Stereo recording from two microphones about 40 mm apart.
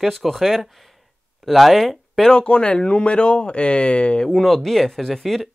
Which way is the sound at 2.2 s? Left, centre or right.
Left.